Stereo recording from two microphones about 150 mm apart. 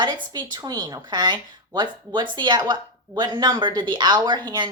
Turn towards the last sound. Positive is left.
turn(degrees=-30)  # may be behind; listen again after turning